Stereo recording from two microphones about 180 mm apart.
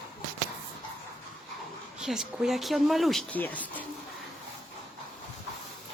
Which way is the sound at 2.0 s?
Centre (ahead or behind).